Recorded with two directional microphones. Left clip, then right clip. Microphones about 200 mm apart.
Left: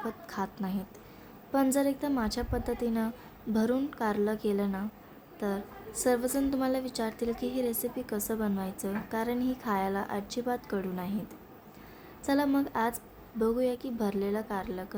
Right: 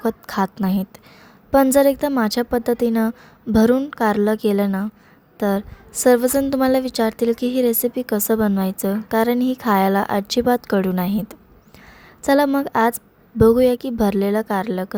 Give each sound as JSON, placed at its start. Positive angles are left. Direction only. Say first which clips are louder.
{"t": 0.0, "sound": "a woman's voice", "louder": "right 14 dB", "side_deg": -45}